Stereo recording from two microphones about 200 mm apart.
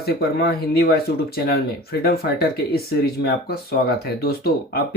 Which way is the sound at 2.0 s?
50° left (ahead or behind).